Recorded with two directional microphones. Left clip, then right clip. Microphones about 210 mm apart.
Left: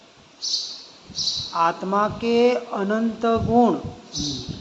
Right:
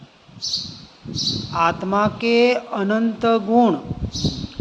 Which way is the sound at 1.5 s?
40° right (ahead or behind).